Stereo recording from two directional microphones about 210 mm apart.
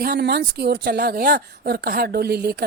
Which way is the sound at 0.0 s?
45° right (ahead or behind).